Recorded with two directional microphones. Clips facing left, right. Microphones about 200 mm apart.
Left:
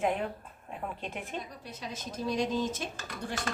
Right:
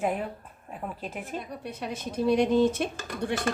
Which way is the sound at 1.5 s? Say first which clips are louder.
Right 7 dB; 60° right (ahead or behind).